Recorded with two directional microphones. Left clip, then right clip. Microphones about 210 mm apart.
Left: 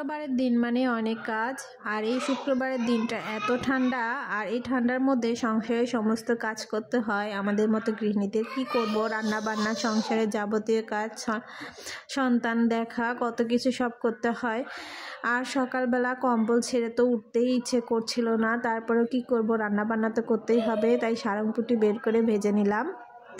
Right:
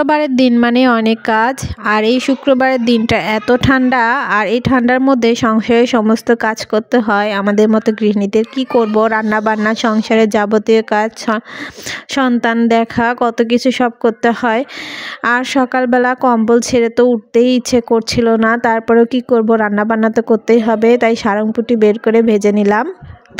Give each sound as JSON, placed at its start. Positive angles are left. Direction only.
{"t": 0.0, "sound": "a woman's voice", "side_deg": -45}